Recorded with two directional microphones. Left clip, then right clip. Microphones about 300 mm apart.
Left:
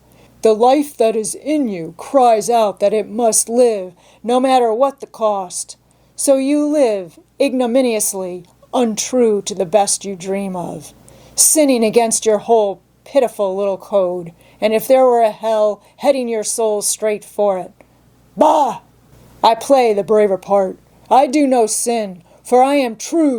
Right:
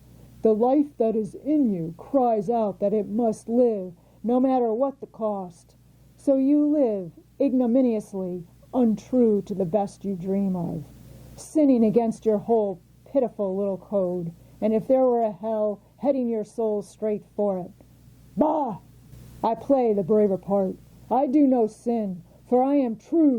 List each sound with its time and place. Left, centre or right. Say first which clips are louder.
0.7 s a woman's voice: left 9 dB; centre; by 10.8 s left
11.3 s speech: left 8 dB; centre
12.5 s a woman's voice: left 11 dB; left
13.1 s speech: left 9 dB; centre
13.3 s a woman's voice: left 9 dB; left
14.6 s a woman's voice: left 9 dB; centre